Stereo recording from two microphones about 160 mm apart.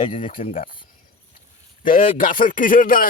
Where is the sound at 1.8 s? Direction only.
60° left (ahead or behind).